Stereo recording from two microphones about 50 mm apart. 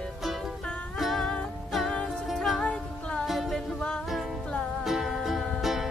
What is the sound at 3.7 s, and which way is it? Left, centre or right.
Music, centre.